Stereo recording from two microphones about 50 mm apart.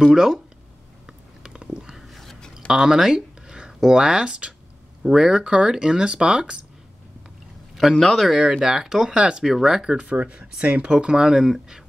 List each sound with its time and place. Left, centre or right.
0.0 s speech: centre
1.0 s a sound: centre
2.7 s speech: centre
7.9 s speech: centre
8.5 s speech: centre
9.1 s speech: right
9.4 s speech: centre
9.9 s speech: right
10.6 s speech: right